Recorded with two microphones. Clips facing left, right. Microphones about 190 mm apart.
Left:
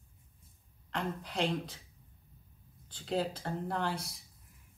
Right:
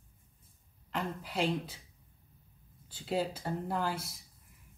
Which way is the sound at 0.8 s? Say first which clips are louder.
Even; 5° right (ahead or behind).